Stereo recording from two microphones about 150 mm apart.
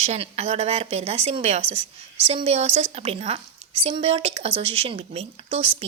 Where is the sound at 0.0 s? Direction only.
45° right (ahead or behind).